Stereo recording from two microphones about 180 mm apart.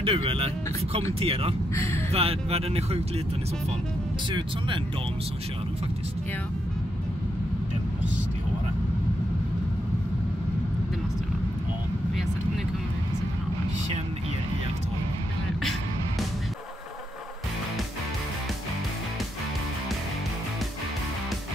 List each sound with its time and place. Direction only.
0.0 s speech: 30° right (ahead or behind)
1.8 s speech: 15° left (ahead or behind)
2.1 s speech: 35° right (ahead or behind)
4.3 s speech: 25° right (ahead or behind)